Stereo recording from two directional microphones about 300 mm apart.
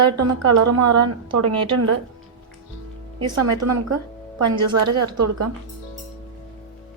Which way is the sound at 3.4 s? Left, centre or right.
Right.